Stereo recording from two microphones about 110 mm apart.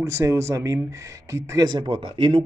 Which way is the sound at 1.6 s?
45° right (ahead or behind).